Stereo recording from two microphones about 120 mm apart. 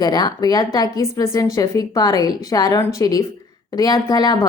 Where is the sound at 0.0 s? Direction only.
35° left (ahead or behind).